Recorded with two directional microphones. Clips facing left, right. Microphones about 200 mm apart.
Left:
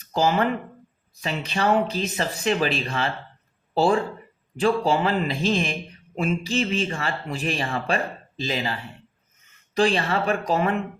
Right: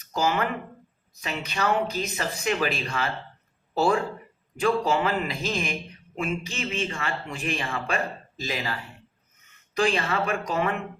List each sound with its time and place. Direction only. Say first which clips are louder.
0.1 s speech: left 4 dB; 30° left (ahead or behind)
4.5 s speech: left 2 dB; 30° left (ahead or behind)